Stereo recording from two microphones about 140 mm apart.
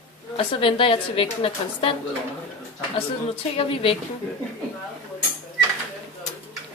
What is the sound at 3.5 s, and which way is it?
Speech, 40° left (ahead or behind).